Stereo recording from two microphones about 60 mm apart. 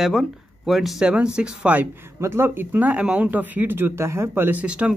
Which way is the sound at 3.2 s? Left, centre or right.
Right.